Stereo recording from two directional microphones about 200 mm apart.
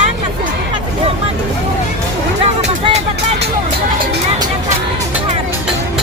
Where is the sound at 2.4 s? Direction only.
30° right (ahead or behind).